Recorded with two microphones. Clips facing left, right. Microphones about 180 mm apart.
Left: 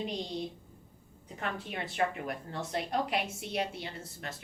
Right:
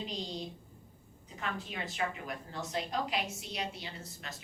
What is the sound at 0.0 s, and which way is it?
Speech, 60° left (ahead or behind).